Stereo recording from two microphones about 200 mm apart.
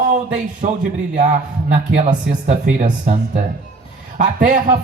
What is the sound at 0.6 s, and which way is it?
A man's voice, 35° right (ahead or behind).